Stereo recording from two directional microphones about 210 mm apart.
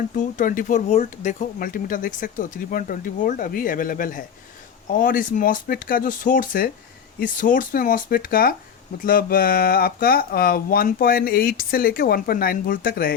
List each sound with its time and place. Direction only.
0.2 s speech: 40° left (ahead or behind)